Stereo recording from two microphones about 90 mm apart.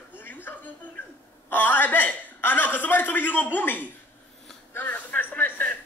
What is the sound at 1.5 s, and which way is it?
A man's voice, 20° left (ahead or behind).